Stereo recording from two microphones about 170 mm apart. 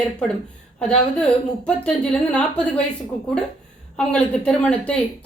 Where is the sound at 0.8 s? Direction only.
5° left (ahead or behind).